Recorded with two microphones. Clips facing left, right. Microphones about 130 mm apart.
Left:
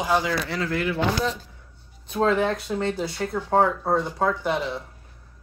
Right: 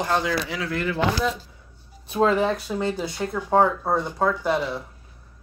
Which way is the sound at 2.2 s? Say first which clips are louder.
Even; 5° right (ahead or behind).